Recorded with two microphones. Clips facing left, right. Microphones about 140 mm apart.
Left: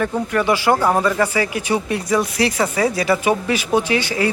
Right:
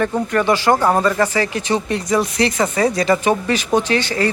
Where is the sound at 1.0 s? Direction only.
10° left (ahead or behind).